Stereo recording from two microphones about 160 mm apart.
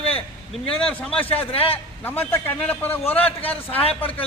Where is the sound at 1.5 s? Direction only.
35° left (ahead or behind).